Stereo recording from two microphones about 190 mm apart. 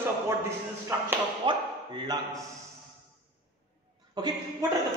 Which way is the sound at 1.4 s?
20° right (ahead or behind).